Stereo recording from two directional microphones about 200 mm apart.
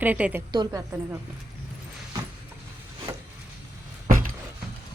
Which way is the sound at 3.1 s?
15° right (ahead or behind).